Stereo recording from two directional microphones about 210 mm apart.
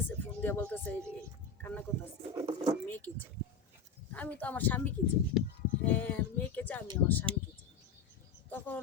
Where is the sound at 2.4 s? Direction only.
20° right (ahead or behind).